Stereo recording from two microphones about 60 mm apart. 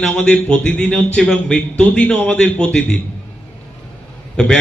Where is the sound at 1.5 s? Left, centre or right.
Left.